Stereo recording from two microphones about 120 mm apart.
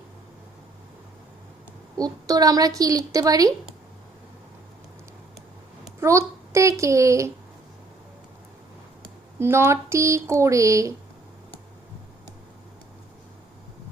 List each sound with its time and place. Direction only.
2.0 s a woman's voice: 30° right (ahead or behind)
6.0 s a woman's voice: 25° right (ahead or behind)
9.4 s speech: 20° right (ahead or behind)